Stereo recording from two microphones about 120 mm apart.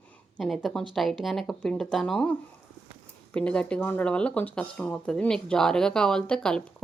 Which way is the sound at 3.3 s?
10° left (ahead or behind).